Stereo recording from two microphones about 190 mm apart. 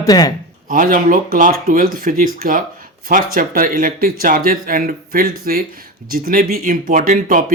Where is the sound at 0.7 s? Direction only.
45° right (ahead or behind).